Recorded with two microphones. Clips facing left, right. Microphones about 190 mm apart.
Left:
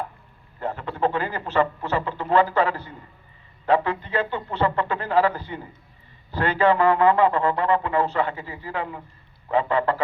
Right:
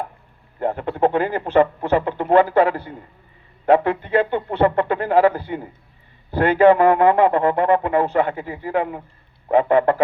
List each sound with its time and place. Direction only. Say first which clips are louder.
0.6 s a man's voice: right 6 dB; 55° right (ahead or behind)